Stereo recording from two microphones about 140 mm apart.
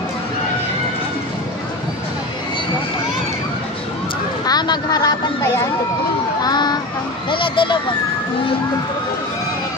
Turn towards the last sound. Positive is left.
turn(degrees=35)  # may be behind; listen again after turning